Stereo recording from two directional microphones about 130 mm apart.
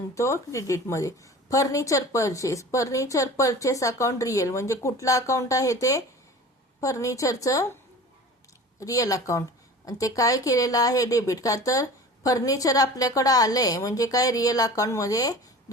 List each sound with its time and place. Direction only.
0.1 s a woman's voice: 25° left (ahead or behind)
6.7 s a woman's voice: 25° left (ahead or behind)
8.8 s a woman's voice: 25° left (ahead or behind)